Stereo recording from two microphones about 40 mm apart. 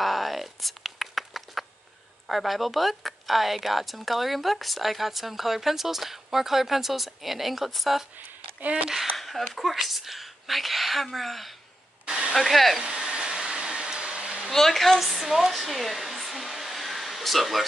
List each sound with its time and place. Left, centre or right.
0.0 s a sound: centre
2.2 s speech: centre
8.6 s speech: right
9.1 s a sound: centre
9.6 s speech: centre
12.1 s hair dryer: centre
12.4 s speech: centre
12.8 s a sound: centre
14.5 s speech: centre